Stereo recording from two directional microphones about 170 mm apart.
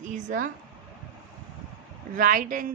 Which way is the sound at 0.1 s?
50° right (ahead or behind).